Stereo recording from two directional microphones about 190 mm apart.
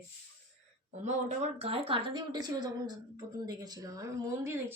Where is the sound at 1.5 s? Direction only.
30° right (ahead or behind).